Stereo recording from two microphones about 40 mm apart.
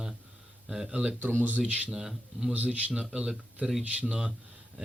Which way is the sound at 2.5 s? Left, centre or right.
Right.